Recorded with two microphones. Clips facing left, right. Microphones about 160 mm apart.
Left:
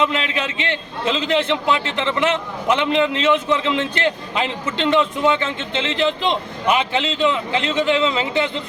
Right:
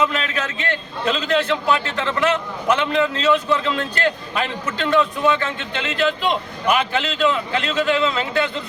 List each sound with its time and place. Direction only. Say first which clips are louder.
0.0 s a man's voice: left 1 dB; 20° left (ahead or behind)